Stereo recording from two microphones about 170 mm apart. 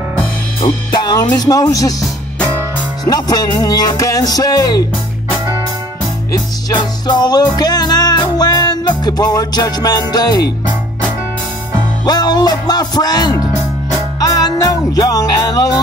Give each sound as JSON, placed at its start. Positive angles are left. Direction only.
{"t": 0.6, "sound": "speech", "side_deg": 25}
{"t": 3.1, "sound": "speech", "side_deg": 25}
{"t": 6.3, "sound": "music", "side_deg": 25}
{"t": 12.0, "sound": "speech", "side_deg": 25}
{"t": 14.2, "sound": "music", "side_deg": 20}